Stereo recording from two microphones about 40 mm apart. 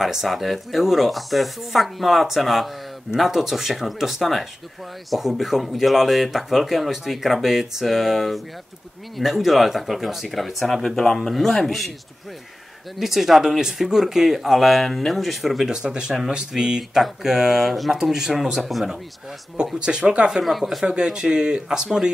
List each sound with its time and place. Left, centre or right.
0.0 s speech: centre
13.0 s speech: centre
15.7 s speech: centre
19.8 s speech: right
20.4 s speech: centre
20.8 s speech: right